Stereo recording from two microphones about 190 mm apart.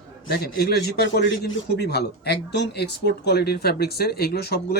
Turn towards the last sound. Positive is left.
turn(degrees=55)  # may be behind; listen again after turning